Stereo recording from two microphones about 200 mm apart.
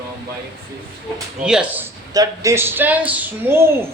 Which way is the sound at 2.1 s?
15° right (ahead or behind).